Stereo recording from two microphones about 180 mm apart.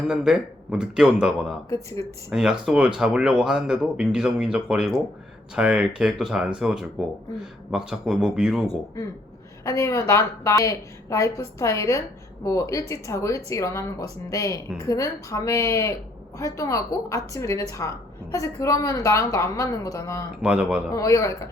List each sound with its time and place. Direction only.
0.1 s speech: 5° right (ahead or behind)
9.6 s a woman's voice: 15° left (ahead or behind)
20.4 s speech: 5° right (ahead or behind)
20.9 s a woman's voice: 20° left (ahead or behind)